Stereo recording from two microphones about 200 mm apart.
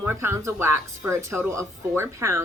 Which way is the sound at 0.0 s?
10° right (ahead or behind).